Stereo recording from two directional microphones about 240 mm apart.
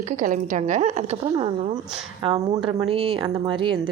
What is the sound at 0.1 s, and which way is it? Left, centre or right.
Speech, right.